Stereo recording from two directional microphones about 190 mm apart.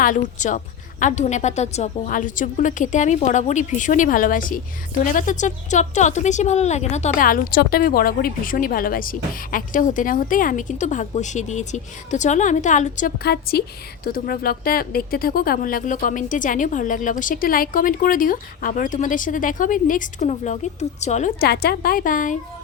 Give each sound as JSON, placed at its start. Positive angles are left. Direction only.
{"t": 0.0, "sound": "a woman's voice", "side_deg": 40}
{"t": 21.4, "sound": "a woman's voice", "side_deg": 55}